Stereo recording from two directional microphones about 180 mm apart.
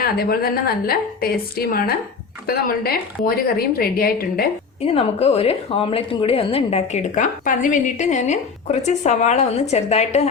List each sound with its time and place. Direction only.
0.0 s a woman's voice: 55° left (ahead or behind)
4.8 s a woman's voice: 35° left (ahead or behind)